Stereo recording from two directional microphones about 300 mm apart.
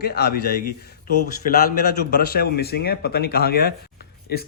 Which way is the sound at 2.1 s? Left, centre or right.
Left.